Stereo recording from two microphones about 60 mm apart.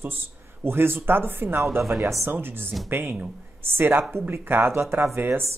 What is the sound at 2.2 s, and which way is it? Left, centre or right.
Speech, right.